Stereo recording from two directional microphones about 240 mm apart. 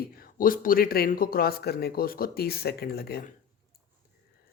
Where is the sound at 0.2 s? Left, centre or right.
Left.